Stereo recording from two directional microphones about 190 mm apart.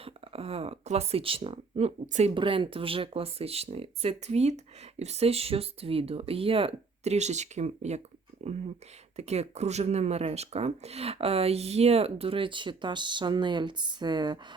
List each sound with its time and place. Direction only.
0.0 s speech: 30° right (ahead or behind)